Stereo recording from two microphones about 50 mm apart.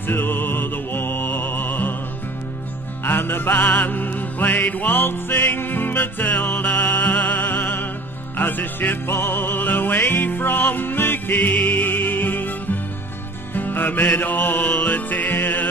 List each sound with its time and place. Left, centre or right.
0.0 s music: left
3.1 s music: left
13.6 s music: left